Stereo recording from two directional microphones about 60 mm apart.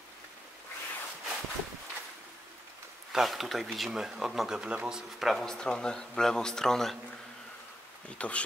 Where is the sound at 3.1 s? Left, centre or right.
Centre.